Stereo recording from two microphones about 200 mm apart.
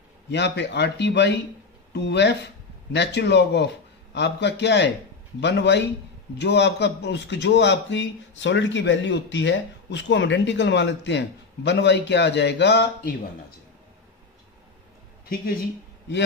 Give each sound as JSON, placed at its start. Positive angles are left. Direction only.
{"t": 0.3, "sound": "speech", "side_deg": 60}